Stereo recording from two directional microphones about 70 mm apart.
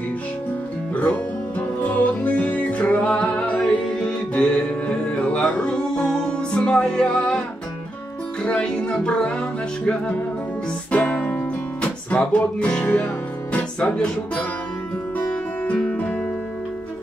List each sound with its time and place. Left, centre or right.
1.8 s music: left
8.5 s music: centre